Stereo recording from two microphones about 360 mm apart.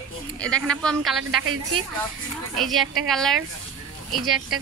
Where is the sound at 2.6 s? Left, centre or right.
Centre.